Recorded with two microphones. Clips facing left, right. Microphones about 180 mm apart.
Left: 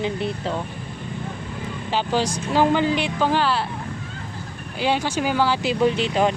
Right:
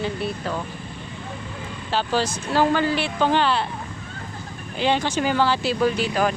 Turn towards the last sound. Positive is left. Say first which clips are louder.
# left 2 dB
turn(degrees=25)  # may be behind; listen again after turning